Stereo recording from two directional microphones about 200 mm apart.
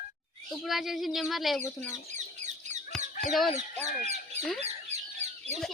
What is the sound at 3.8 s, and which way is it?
Speech, 35° right (ahead or behind).